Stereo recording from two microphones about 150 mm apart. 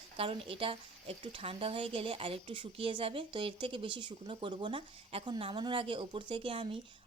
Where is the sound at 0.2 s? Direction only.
40° right (ahead or behind).